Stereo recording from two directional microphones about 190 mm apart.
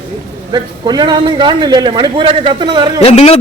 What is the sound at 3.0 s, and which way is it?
Speech, 30° left (ahead or behind).